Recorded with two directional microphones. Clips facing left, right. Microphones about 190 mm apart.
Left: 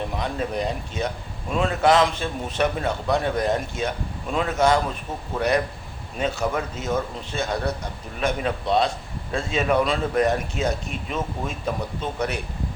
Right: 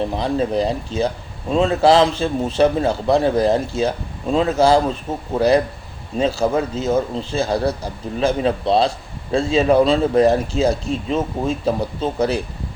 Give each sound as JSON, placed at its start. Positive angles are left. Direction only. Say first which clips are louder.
{"t": 0.0, "sound": "a man's voice", "louder": "right 7 dB", "side_deg": -30}